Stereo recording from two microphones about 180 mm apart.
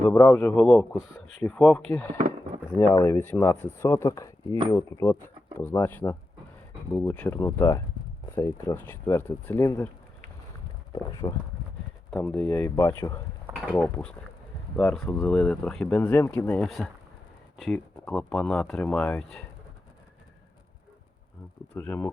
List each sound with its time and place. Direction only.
0.1 s speech: 10° left (ahead or behind)
10.9 s speech: 20° left (ahead or behind)
12.1 s speech: 10° left (ahead or behind)
21.8 s speech: 10° left (ahead or behind)